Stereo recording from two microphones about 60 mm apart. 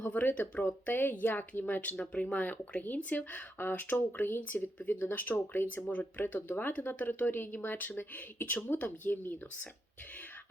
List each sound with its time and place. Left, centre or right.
0.0 s speech: left